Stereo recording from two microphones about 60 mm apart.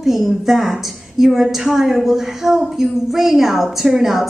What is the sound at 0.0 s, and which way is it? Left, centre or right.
A woman's voice, centre.